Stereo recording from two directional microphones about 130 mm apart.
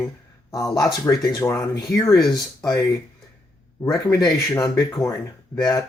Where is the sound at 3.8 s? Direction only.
25° left (ahead or behind).